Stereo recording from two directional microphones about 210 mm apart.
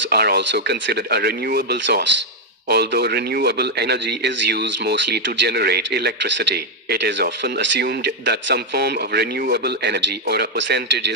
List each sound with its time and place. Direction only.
0.1 s a man's voice: 50° right (ahead or behind)